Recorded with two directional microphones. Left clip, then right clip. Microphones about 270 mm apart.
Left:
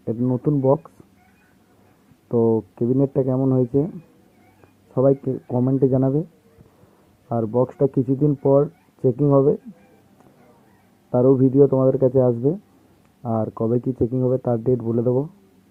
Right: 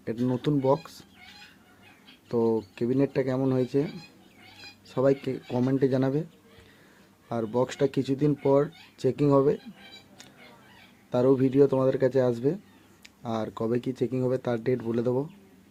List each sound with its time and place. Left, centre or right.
0.2 s speech: centre
2.3 s speech: centre
4.9 s speech: centre
7.3 s speech: centre
11.1 s speech: centre